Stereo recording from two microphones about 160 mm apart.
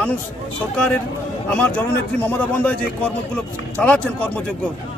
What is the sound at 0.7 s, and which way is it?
Speech, 5° left (ahead or behind).